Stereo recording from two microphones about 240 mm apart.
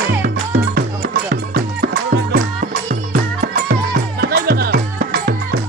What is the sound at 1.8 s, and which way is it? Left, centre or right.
Music, right.